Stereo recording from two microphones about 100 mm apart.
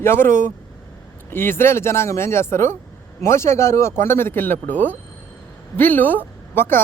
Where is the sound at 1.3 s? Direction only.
25° left (ahead or behind).